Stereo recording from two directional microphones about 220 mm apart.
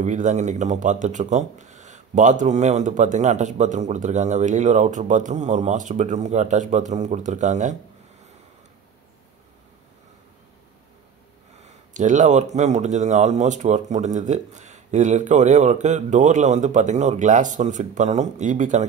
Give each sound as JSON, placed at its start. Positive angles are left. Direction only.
{"t": 0.0, "sound": "speech", "side_deg": -35}
{"t": 11.6, "sound": "speech", "side_deg": -35}